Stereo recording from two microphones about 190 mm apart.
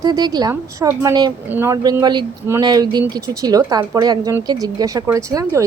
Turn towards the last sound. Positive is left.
turn(degrees=-15)  # may be behind; listen again after turning